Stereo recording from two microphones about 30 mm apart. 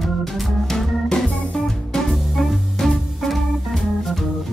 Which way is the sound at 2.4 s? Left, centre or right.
Centre.